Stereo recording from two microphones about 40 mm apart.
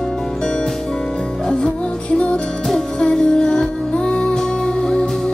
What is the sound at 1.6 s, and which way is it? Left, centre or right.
Music, left.